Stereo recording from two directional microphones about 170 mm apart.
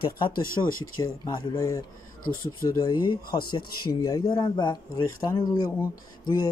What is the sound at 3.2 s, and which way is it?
Speech, 60° left (ahead or behind).